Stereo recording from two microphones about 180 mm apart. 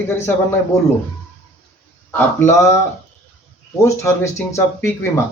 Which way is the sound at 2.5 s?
15° left (ahead or behind).